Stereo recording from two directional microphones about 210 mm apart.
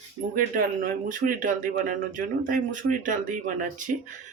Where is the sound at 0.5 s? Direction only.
40° right (ahead or behind).